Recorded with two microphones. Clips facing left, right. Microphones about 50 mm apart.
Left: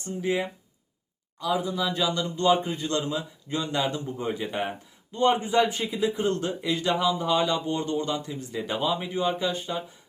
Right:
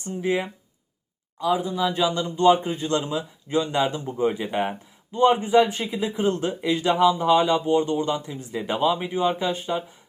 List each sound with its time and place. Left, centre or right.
0.0 s a man's voice: right
1.5 s a man's voice: centre
4.4 s speech: right
4.7 s speech: centre
6.2 s a man's voice: right
9.1 s a man's voice: right